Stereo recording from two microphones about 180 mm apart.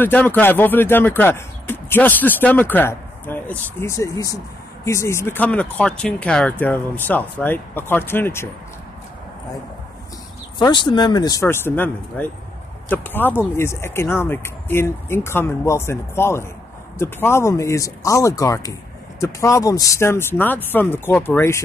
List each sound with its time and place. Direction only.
0.0 s speech: 10° left (ahead or behind)
10.6 s speech: 25° left (ahead or behind)